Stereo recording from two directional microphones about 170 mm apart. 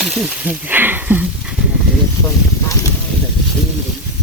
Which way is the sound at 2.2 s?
15° left (ahead or behind).